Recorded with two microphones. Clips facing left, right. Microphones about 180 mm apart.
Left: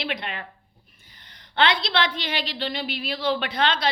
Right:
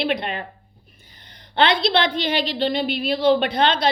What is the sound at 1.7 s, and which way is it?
A woman's voice, 60° right (ahead or behind).